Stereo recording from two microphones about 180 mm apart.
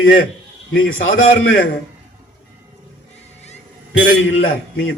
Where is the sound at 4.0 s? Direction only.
90° left.